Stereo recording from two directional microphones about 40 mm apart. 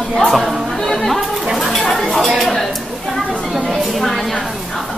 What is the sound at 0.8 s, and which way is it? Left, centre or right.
Music, centre.